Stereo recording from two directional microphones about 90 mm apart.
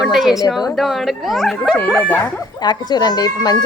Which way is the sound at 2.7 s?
50° left (ahead or behind).